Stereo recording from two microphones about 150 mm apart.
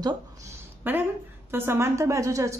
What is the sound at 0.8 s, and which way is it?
A woman's voice, 10° right (ahead or behind).